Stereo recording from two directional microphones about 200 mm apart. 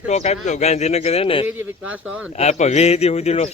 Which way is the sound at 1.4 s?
10° right (ahead or behind).